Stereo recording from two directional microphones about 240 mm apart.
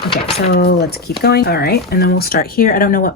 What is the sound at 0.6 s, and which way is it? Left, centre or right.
Speech, left.